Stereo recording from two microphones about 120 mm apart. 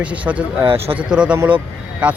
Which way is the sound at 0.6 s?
50° right (ahead or behind).